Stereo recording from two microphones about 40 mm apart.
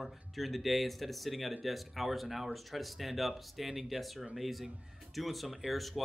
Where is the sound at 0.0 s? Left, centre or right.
Centre.